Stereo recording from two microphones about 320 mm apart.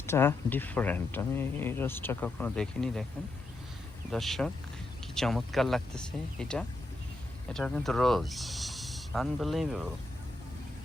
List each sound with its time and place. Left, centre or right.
0.0 s speech: centre
4.1 s speech: centre